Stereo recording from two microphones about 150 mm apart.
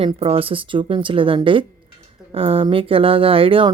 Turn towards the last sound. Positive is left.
turn(degrees=-35)  # may be behind; listen again after turning